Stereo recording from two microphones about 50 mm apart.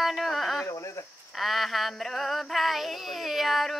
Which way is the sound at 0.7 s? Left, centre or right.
Left.